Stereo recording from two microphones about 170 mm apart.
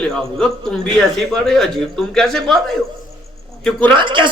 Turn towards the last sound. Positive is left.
turn(degrees=-30)  # may be behind; listen again after turning